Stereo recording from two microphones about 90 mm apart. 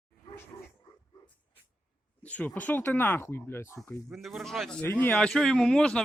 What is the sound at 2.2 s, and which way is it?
Speech, 15° left (ahead or behind).